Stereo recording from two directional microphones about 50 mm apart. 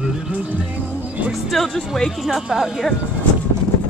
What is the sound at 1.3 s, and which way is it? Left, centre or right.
Speech, centre.